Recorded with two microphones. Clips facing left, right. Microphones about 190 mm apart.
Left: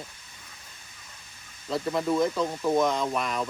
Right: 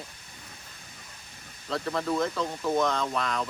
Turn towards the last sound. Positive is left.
turn(degrees=10)  # may be behind; listen again after turning